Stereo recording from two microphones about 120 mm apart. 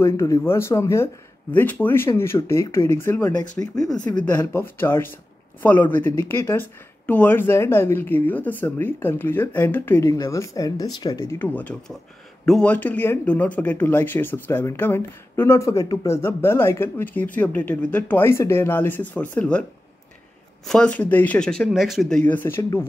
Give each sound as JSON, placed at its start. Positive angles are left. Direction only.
{"t": 0.0, "sound": "speech", "side_deg": 25}
{"t": 3.7, "sound": "speech", "side_deg": 30}
{"t": 4.2, "sound": "speech", "side_deg": 15}
{"t": 10.1, "sound": "speech", "side_deg": 30}
{"t": 11.1, "sound": "speech", "side_deg": 20}
{"t": 16.2, "sound": "speech", "side_deg": 20}
{"t": 20.6, "sound": "speech", "side_deg": 5}
{"t": 22.2, "sound": "speech", "side_deg": 15}
{"t": 22.6, "sound": "speech", "side_deg": 25}